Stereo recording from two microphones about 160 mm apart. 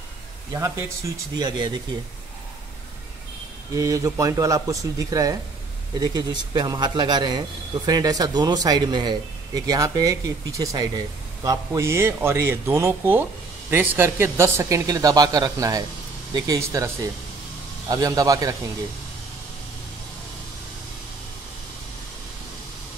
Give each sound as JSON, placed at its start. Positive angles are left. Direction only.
{"t": 0.5, "sound": "a man's voice", "side_deg": -20}
{"t": 3.7, "sound": "a man's voice", "side_deg": -20}